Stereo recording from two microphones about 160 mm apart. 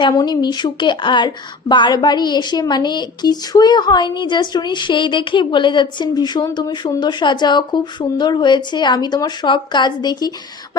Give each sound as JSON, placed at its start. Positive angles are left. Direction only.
{"t": 0.1, "sound": "speech", "side_deg": 25}